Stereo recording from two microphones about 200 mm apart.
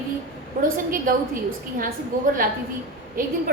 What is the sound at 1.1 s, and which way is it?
Speech, 45° right (ahead or behind).